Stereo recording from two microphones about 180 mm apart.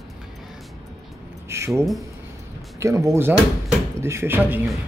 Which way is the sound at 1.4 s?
15° right (ahead or behind).